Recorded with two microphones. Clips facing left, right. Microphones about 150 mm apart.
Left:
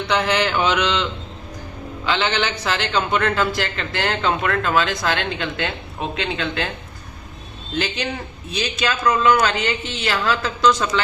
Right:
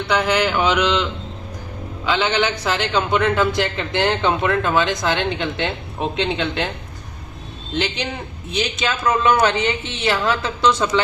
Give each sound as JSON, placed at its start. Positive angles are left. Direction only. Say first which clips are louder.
{"t": 0.1, "sound": "a man's voice", "louder": "right 1 dB", "side_deg": -10}
{"t": 8.5, "sound": "a man's voice", "louder": "right 1 dB", "side_deg": -20}